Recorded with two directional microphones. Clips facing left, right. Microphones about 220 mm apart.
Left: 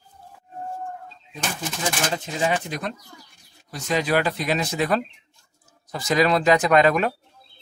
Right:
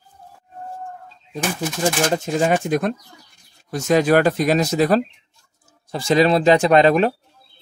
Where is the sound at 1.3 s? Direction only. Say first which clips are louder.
Right 6 dB; 45° right (ahead or behind).